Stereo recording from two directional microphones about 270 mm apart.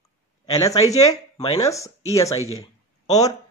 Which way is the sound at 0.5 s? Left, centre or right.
Left.